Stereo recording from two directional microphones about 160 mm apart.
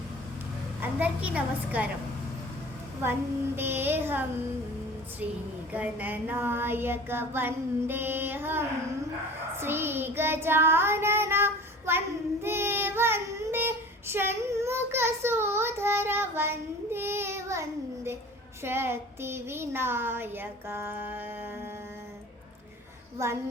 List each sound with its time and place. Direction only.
0.8 s child singing: 10° right (ahead or behind)
3.0 s child singing: 15° right (ahead or behind)
5.7 s child singing: 10° right (ahead or behind)
23.1 s child singing: 15° right (ahead or behind)